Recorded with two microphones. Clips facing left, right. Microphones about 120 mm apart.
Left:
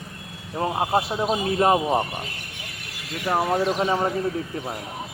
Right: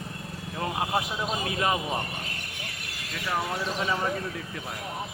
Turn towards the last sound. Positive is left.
turn(degrees=35)  # may be behind; listen again after turning